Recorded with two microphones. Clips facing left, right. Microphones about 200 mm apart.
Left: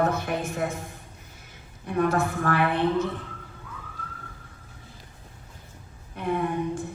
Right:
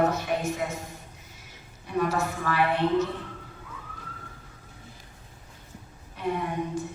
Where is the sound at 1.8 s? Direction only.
55° left (ahead or behind).